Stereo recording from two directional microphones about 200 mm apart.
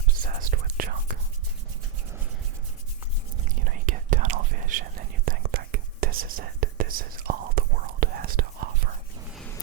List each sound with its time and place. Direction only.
0.1 s whispering: 45° right (ahead or behind)
3.4 s whispering: 40° right (ahead or behind)